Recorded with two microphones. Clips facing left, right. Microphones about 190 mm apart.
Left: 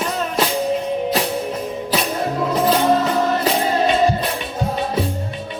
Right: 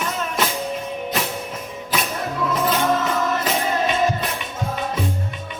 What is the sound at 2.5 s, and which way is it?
Music, 35° left (ahead or behind).